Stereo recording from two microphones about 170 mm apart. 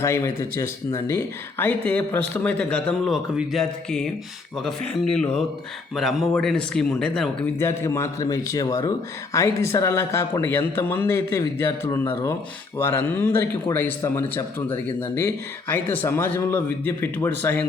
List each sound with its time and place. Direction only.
0.0 s speech: 15° left (ahead or behind)